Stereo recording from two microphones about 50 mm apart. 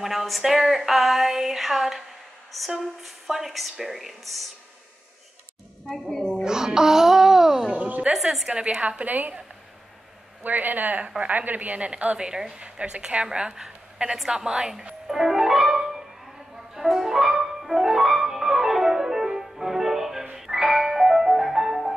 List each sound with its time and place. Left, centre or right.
0.0 s speech: centre
5.9 s a woman's voice: centre
6.4 s music: centre
7.8 s a sound: right
8.1 s speech: centre
8.5 s a woman's voice: right
10.4 s a woman's voice: right; by 14.9 s centre
15.0 s music: centre